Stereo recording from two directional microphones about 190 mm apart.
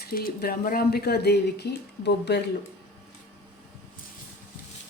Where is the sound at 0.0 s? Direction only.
50° left (ahead or behind).